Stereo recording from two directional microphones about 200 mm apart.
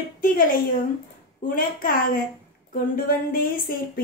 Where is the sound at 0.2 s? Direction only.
45° left (ahead or behind).